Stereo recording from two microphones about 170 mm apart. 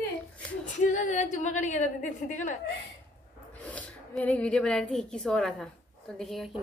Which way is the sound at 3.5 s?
10° left (ahead or behind).